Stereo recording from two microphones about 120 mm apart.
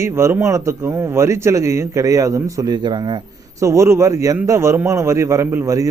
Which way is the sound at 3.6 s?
25° right (ahead or behind).